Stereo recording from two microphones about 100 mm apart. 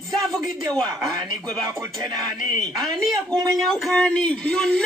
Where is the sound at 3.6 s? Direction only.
5° left (ahead or behind).